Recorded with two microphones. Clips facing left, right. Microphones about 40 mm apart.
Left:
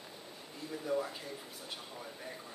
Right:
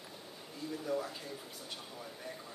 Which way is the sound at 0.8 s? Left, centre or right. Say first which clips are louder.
Left 3 dB; centre.